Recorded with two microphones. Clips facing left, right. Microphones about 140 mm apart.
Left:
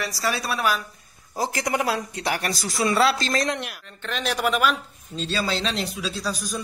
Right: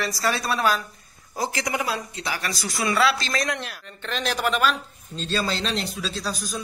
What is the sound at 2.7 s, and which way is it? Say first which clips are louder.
Speech: left 1 dB; 35° left (ahead or behind).